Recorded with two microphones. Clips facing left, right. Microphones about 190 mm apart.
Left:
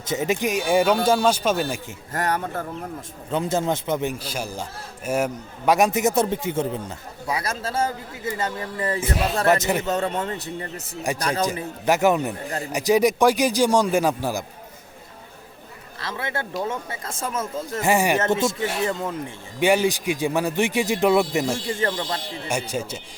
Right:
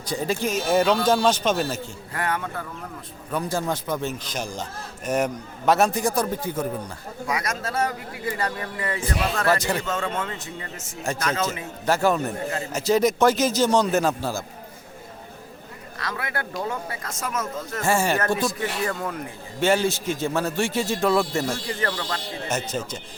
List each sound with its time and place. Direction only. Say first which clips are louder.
0.0 s a man's voice: left 2 dB; 20° left (ahead or behind)
2.1 s a man's voice: left 3 dB; 40° left (ahead or behind)
3.2 s a man's voice: left 3 dB; 25° left (ahead or behind)
5.0 s a man's voice: even; 5° left (ahead or behind); by 9.5 s 30° left (ahead or behind)
9.5 s a man's voice: left 3 dB; 20° left (ahead or behind)
9.8 s a man's voice: left 3 dB; 40° left (ahead or behind)
11.9 s a man's voice: left 2 dB; 15° left (ahead or behind)
16.0 s a man's voice: left 1 dB; 25° left (ahead or behind)
17.8 s a man's voice: left 2 dB; 15° left (ahead or behind)
22.4 s a man's voice: left 1 dB; 10° left (ahead or behind)